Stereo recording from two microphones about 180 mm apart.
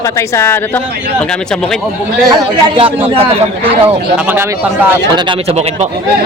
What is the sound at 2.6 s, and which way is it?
Speech, 30° right (ahead or behind).